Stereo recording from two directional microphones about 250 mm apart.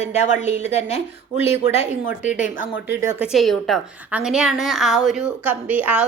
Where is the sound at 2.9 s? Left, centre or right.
Centre.